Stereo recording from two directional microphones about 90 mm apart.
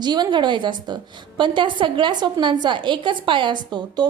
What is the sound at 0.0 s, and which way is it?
A woman's voice, 55° right (ahead or behind).